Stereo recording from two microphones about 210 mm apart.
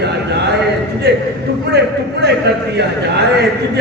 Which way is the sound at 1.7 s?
50° right (ahead or behind).